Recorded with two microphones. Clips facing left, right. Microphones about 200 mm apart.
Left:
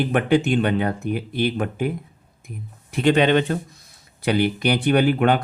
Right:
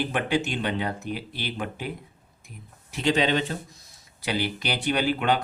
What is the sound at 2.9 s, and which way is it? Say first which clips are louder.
Speech: left 6 dB; 55° left (ahead or behind).